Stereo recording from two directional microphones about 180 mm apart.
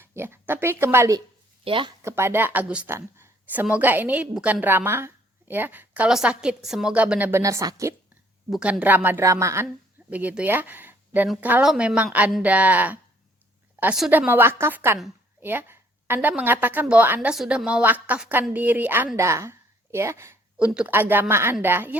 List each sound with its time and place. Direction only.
0.0 s a woman's voice: 15° right (ahead or behind)
1.6 s speech: 30° right (ahead or behind)
2.0 s a woman's voice: 15° right (ahead or behind)
8.4 s a woman's voice: centre (ahead or behind)